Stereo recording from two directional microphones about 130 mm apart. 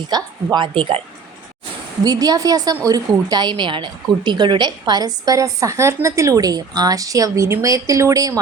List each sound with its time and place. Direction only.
0.1 s a woman's voice: 35° right (ahead or behind)
2.0 s a woman's voice: 30° right (ahead or behind)